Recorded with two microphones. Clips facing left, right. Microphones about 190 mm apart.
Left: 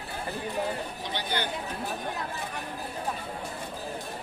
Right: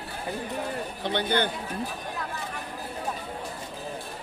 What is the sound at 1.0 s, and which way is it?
Speech, 60° right (ahead or behind).